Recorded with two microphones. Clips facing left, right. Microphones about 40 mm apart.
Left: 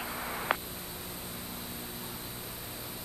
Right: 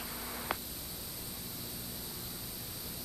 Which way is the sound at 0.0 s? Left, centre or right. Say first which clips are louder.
Left 6 dB; left.